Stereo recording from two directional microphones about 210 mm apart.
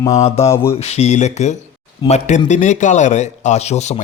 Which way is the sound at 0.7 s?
30° left (ahead or behind).